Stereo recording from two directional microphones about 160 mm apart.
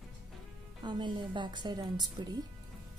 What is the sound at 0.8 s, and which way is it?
A woman's voice, 30° right (ahead or behind).